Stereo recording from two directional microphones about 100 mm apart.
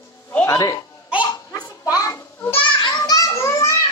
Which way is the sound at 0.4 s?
35° left (ahead or behind).